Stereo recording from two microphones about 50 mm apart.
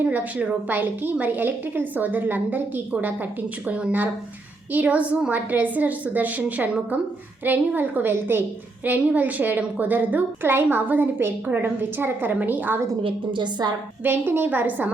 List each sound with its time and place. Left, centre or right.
0.0 s a woman's voice: right
3.7 s a woman's voice: right
14.0 s a woman's voice: right